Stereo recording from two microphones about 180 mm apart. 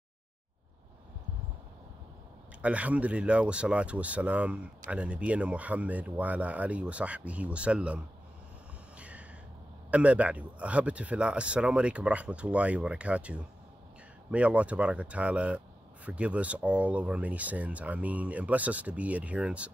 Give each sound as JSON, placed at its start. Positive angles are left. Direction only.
{"t": 2.6, "sound": "speech", "side_deg": -5}
{"t": 8.9, "sound": "a sound", "side_deg": -5}
{"t": 9.8, "sound": "speech", "side_deg": -5}